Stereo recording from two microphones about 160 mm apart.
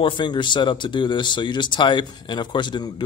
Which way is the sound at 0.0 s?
30° left (ahead or behind).